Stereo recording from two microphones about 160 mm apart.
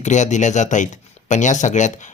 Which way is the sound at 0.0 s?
50° left (ahead or behind).